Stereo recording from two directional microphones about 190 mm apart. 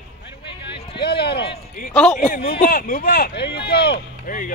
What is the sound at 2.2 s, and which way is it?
Speech, 45° left (ahead or behind).